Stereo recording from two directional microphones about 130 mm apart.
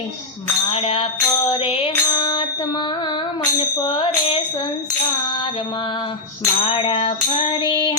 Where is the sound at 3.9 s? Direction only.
40° left (ahead or behind).